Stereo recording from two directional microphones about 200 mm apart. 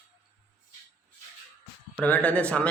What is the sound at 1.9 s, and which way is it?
Speech, 5° left (ahead or behind).